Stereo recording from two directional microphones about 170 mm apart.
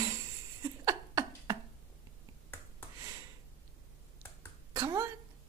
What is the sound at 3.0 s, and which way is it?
Sniff, 20° right (ahead or behind).